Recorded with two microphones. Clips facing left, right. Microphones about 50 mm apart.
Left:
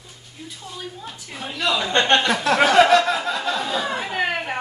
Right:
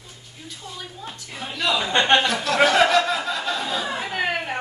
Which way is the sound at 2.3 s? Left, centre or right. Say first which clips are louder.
Left 4 dB; left.